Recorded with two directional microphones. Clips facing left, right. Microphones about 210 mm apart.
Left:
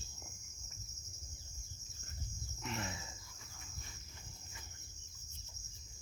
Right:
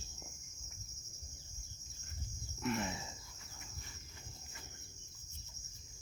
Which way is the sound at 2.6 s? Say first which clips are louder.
Right 6 dB; 55° right (ahead or behind).